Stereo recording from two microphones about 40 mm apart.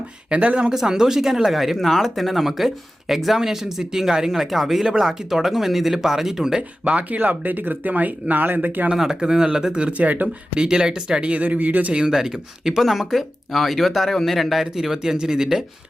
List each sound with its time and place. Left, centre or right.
0.3 s a man's voice: right
0.7 s speech: centre
6.6 s speech: right
9.0 s speech: centre
10.0 s speech: right
10.5 s speech: centre
11.4 s a man's voice: right
11.9 s speech: centre